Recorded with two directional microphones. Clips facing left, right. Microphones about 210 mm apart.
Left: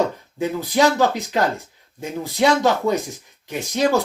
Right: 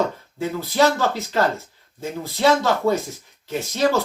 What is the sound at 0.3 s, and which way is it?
Speech, 15° left (ahead or behind).